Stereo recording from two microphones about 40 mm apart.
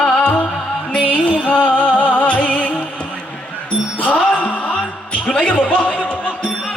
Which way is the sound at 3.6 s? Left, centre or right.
Left.